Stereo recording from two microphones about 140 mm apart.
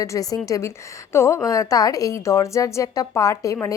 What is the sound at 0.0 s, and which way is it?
A woman's voice, 25° left (ahead or behind).